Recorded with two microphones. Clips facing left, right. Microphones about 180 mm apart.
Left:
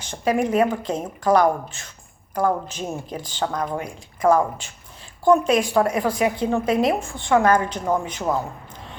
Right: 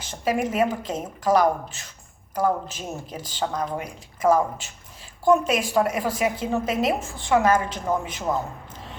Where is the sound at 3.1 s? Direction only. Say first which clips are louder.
Left 4 dB; 5° right (ahead or behind).